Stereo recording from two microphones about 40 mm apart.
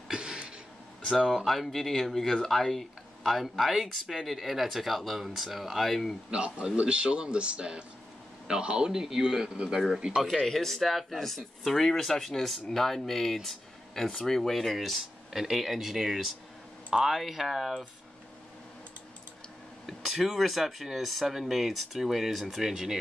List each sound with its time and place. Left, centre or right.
0.1 s a sound: right
1.1 s speech: centre
6.3 s speech: right
10.4 s speech: centre
19.9 s speech: centre
22.6 s speech: centre